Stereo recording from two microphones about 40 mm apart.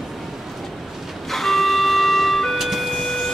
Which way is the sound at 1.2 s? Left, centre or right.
Centre.